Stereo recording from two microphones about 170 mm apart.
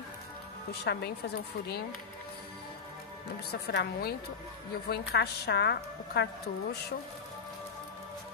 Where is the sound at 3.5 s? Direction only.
75° left (ahead or behind).